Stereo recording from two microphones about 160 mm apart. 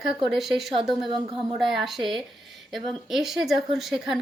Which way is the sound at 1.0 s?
30° right (ahead or behind).